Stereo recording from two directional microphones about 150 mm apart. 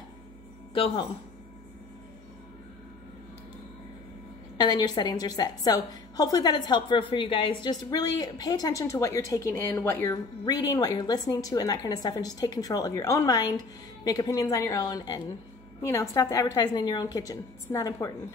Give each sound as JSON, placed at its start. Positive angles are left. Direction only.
{"t": 0.7, "sound": "speech", "side_deg": 40}
{"t": 4.6, "sound": "a woman's voice", "side_deg": 25}
{"t": 10.4, "sound": "a woman's voice", "side_deg": 25}